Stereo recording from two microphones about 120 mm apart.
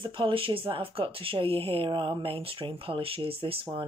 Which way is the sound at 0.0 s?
45° right (ahead or behind).